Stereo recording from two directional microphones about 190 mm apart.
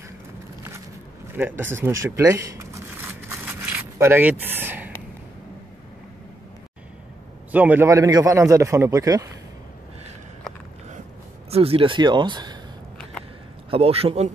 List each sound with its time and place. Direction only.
1.3 s a man's voice: 10° right (ahead or behind)
2.0 s crumpling: 15° right (ahead or behind)
7.5 s a man's voice: 10° right (ahead or behind)
11.5 s speech: 30° right (ahead or behind)
13.7 s a man's voice: 30° right (ahead or behind)